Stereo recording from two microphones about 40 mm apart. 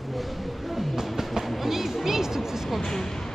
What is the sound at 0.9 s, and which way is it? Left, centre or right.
Music, centre.